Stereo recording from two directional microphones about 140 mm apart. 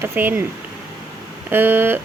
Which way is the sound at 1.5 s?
15° right (ahead or behind).